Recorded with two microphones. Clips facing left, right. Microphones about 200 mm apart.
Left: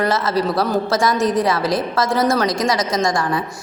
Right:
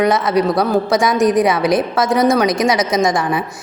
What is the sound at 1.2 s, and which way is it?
A man's voice, 15° right (ahead or behind).